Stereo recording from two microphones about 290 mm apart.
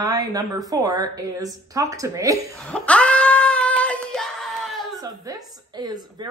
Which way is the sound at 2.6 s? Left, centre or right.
Centre.